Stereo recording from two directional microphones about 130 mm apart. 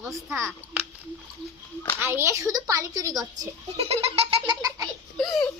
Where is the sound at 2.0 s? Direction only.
20° right (ahead or behind).